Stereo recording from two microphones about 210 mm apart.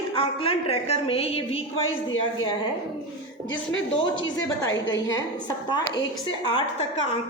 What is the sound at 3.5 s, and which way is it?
Speech, 65° left (ahead or behind).